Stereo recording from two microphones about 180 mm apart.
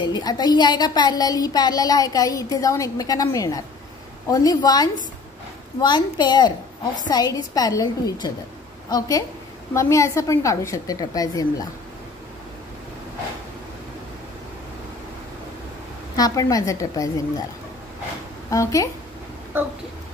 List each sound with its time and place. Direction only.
0.0 s a woman's voice: 25° left (ahead or behind)
16.2 s speech: 20° left (ahead or behind)
18.5 s speech: 20° left (ahead or behind)